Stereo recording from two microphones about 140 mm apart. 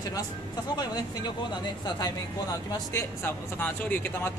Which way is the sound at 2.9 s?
15° left (ahead or behind).